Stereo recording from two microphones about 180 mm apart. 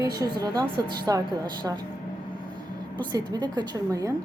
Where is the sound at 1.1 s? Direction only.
20° right (ahead or behind).